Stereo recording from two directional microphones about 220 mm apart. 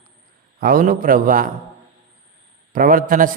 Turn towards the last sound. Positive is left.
turn(degrees=-40)  # may be behind; listen again after turning